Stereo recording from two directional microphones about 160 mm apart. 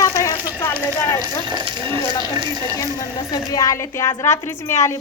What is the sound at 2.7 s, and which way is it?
A woman's voice, 20° left (ahead or behind).